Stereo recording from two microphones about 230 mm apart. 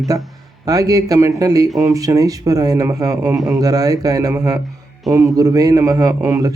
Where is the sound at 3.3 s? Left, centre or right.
Centre.